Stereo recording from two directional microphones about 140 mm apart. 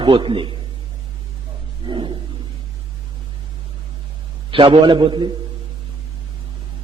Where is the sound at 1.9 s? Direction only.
35° right (ahead or behind).